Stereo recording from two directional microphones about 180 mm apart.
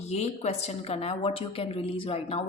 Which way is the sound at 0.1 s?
35° left (ahead or behind).